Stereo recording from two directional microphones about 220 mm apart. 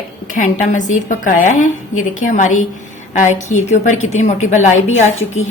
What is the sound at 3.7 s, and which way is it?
A woman's voice, 35° left (ahead or behind).